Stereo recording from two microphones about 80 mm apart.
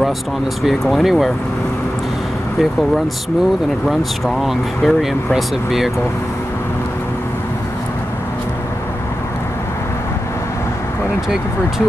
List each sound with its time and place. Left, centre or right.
0.7 s speech: centre
4.4 s speech: centre